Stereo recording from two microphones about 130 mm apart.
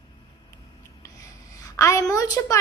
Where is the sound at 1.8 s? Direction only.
25° left (ahead or behind).